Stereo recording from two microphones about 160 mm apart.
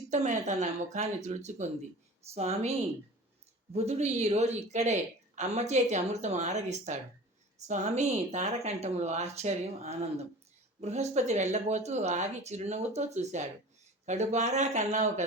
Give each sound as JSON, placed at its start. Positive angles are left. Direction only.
{"t": 0.1, "sound": "a woman's voice", "side_deg": -50}